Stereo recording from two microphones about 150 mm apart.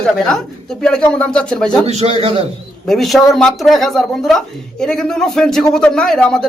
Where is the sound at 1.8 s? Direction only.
45° right (ahead or behind).